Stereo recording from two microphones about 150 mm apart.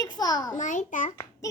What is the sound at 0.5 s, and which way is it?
Speech, 55° left (ahead or behind).